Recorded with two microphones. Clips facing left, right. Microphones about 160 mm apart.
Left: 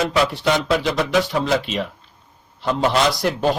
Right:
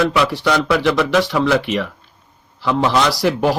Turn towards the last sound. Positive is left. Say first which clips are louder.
# right 2 dB
turn(degrees=-70)  # may be behind; listen again after turning